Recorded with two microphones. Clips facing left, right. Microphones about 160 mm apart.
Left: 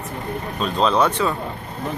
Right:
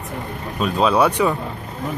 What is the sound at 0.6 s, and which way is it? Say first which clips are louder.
Speech: right 2 dB; 10° right (ahead or behind).